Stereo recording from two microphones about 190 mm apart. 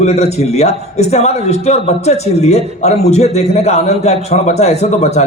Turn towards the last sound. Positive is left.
turn(degrees=35)  # may be behind; listen again after turning